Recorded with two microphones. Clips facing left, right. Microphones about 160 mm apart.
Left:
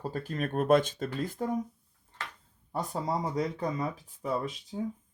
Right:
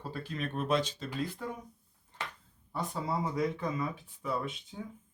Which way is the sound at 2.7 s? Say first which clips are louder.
Left 3 dB; 45° left (ahead or behind).